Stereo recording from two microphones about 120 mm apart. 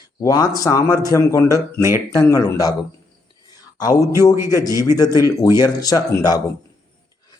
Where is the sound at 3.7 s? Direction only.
30° left (ahead or behind).